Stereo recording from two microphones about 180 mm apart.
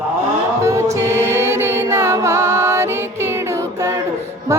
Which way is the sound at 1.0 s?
15° right (ahead or behind).